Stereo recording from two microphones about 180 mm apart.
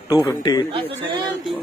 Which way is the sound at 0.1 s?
20° left (ahead or behind).